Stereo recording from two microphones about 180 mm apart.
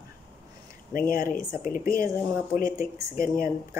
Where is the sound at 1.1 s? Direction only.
50° left (ahead or behind).